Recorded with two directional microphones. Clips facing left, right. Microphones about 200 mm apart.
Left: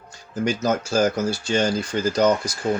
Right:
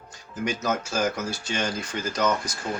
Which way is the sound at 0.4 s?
35° left (ahead or behind).